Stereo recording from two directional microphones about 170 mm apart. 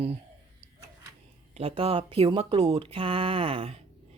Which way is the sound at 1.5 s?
35° right (ahead or behind).